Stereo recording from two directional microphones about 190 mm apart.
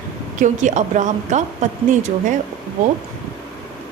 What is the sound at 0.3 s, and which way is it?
A woman's voice, 40° right (ahead or behind).